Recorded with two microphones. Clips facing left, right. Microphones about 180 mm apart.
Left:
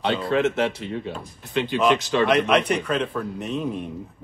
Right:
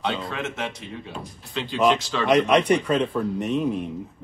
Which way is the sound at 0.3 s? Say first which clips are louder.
Left 9 dB; 60° left (ahead or behind).